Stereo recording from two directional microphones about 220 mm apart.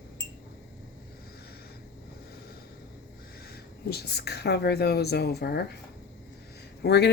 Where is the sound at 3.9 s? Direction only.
50° left (ahead or behind).